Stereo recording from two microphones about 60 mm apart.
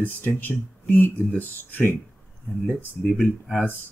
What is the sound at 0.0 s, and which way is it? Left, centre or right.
Speech, left.